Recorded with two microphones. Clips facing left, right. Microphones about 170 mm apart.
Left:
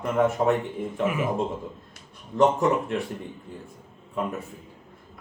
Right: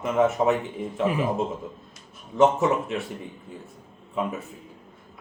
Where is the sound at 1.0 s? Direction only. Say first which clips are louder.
Right 2 dB; 30° right (ahead or behind).